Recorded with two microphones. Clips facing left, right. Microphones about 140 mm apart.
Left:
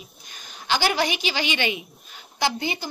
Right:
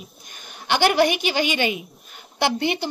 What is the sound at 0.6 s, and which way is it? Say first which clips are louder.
A woman's voice: right 5 dB; 60° right (ahead or behind).